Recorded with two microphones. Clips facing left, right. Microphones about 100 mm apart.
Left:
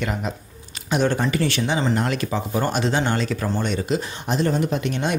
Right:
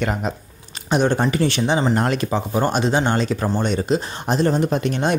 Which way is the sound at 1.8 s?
40° right (ahead or behind).